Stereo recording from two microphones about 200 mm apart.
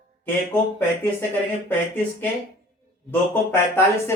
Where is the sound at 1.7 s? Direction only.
10° left (ahead or behind).